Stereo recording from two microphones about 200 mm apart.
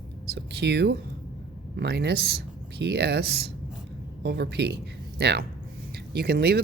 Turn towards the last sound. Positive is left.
turn(degrees=-50)  # may be behind; listen again after turning